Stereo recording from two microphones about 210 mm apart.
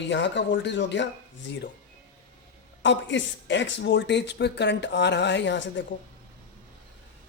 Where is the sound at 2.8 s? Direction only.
60° left (ahead or behind).